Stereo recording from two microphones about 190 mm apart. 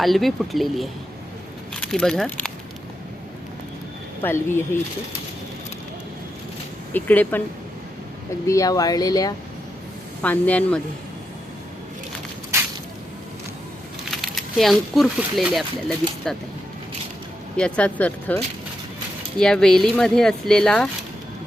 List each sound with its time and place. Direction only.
0.0 s speech: centre (ahead or behind)
4.2 s speech: 10° left (ahead or behind)
6.9 s speech: 10° left (ahead or behind)
8.4 s speech: 20° left (ahead or behind)
10.2 s speech: 10° left (ahead or behind)
14.1 s speech: centre (ahead or behind)
17.6 s speech: 5° left (ahead or behind)
19.4 s speech: 5° left (ahead or behind)